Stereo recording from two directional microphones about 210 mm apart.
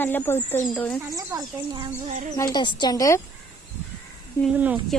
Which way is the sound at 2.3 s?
20° left (ahead or behind).